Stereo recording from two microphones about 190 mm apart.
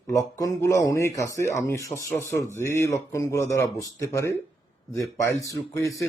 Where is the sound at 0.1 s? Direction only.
20° left (ahead or behind).